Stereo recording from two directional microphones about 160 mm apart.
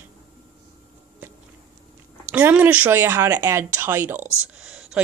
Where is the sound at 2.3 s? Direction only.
10° right (ahead or behind).